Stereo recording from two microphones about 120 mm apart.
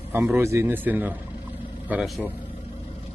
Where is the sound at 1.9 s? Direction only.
Centre (ahead or behind).